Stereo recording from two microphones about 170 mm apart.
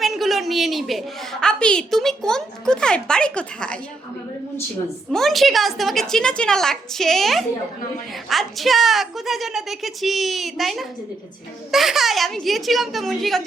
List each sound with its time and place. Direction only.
0.0 s a woman's voice: centre (ahead or behind)
5.1 s a woman's voice: centre (ahead or behind)